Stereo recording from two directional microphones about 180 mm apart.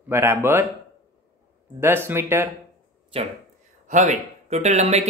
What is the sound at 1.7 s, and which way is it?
Speech, 15° right (ahead or behind).